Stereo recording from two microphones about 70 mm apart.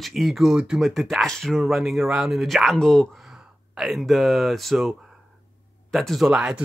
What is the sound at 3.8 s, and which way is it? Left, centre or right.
Speech, centre.